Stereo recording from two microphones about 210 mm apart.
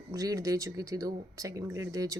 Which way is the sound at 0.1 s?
15° right (ahead or behind).